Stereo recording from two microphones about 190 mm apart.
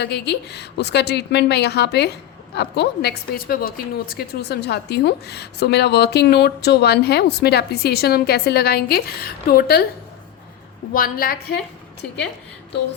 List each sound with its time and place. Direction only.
0.0 s a woman's voice: 60° left (ahead or behind)
10.9 s a woman's voice: 50° left (ahead or behind)